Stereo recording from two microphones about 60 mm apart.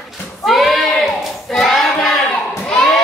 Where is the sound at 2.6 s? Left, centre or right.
Centre.